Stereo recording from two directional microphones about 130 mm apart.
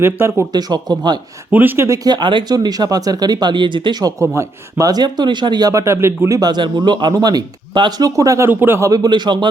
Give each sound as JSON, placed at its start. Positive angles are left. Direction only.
{"t": 0.0, "sound": "speech", "side_deg": -20}
{"t": 0.5, "sound": "speech", "side_deg": -30}
{"t": 1.5, "sound": "speech", "side_deg": -15}
{"t": 2.0, "sound": "speech", "side_deg": -35}
{"t": 8.9, "sound": "speech", "side_deg": -30}